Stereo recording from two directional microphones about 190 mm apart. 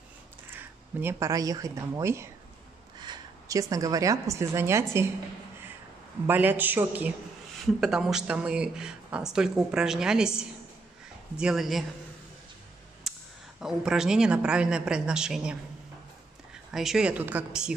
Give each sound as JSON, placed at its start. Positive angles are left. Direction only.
{"t": 0.5, "sound": "a woman's voice", "side_deg": -10}
{"t": 6.2, "sound": "a man's voice", "side_deg": -10}
{"t": 13.0, "sound": "a sound", "side_deg": 0}
{"t": 13.6, "sound": "speech", "side_deg": -5}
{"t": 16.7, "sound": "speech", "side_deg": 0}